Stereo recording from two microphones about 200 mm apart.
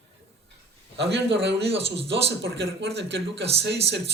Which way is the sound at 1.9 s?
60° right (ahead or behind).